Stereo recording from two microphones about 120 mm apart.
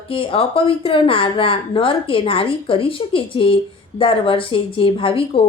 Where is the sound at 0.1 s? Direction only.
50° left (ahead or behind).